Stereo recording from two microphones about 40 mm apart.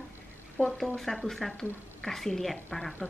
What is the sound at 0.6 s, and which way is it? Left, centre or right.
Speech, left.